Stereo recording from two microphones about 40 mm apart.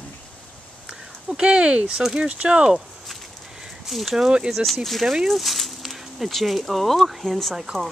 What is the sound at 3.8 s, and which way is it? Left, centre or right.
Speech, centre.